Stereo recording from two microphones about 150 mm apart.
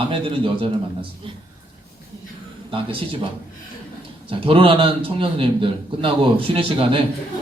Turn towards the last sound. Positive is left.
turn(degrees=-35)  # may be behind; listen again after turning